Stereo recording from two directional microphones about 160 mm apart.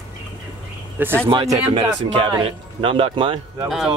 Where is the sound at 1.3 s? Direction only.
25° right (ahead or behind).